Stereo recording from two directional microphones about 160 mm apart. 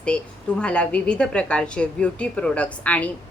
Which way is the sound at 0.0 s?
5° left (ahead or behind).